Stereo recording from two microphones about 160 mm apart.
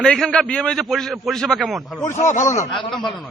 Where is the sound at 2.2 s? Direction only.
50° left (ahead or behind).